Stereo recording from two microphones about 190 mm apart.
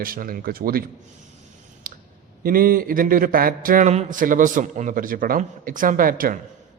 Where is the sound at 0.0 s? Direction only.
50° right (ahead or behind).